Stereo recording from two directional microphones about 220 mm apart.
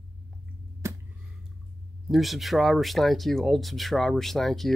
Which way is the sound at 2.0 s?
Centre (ahead or behind).